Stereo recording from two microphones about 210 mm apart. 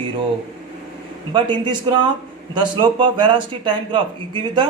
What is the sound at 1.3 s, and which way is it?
Speech, 20° right (ahead or behind).